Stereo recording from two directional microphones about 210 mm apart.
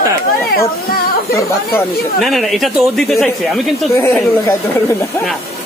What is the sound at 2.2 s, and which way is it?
Speech, centre (ahead or behind).